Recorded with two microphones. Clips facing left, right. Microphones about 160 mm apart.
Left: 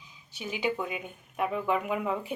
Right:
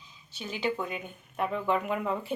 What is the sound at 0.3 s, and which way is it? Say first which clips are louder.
Speech: left 1 dB; 15° left (ahead or behind).